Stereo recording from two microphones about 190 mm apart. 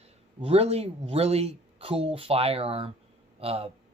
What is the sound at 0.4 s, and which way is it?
Speech, 30° right (ahead or behind).